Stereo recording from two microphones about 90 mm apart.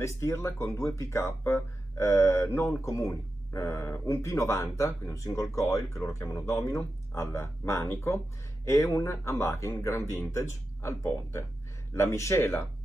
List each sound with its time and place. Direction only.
0.0 s speech: 35° left (ahead or behind)